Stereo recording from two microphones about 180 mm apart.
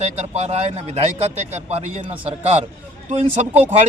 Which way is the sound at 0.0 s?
35° right (ahead or behind).